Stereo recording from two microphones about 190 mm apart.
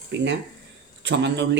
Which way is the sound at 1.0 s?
65° right (ahead or behind).